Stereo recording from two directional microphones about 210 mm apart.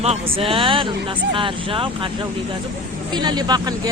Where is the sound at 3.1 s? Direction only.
20° right (ahead or behind).